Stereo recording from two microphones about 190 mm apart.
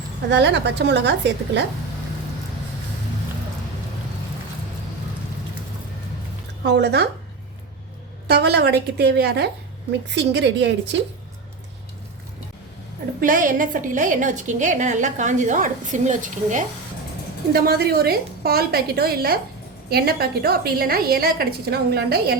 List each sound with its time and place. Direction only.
0.3 s a woman's voice: 65° right (ahead or behind)
6.7 s a woman's voice: 60° right (ahead or behind)
8.3 s a woman's voice: 60° right (ahead or behind)
13.1 s a woman's voice: 45° right (ahead or behind)
17.5 s a woman's voice: 55° right (ahead or behind)